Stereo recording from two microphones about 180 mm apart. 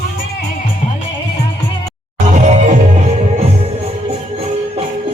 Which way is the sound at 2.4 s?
35° right (ahead or behind).